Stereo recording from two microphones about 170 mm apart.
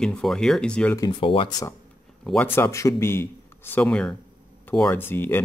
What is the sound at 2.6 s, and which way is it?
Speech, 15° left (ahead or behind).